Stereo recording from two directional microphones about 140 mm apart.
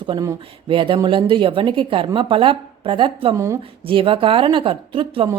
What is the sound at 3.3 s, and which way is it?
Speech, 20° right (ahead or behind).